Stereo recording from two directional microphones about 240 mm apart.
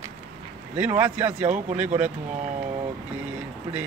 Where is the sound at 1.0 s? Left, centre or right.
Centre.